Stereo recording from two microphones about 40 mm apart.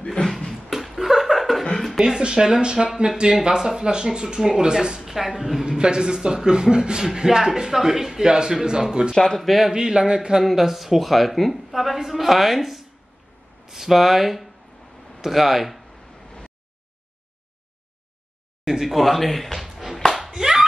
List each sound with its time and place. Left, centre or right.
0.0 s a sound: centre
0.7 s laughter: centre
1.6 s chuckle: centre
2.0 s a man's voice: centre
5.0 s a sound: centre
5.7 s a man's voice: right
9.1 s speech: centre
9.4 s a woman's voice: centre
9.7 s speech: centre
10.4 s a woman's voice: centre
16.3 s a sound: left
18.7 s speech: centre
20.3 s clapping: centre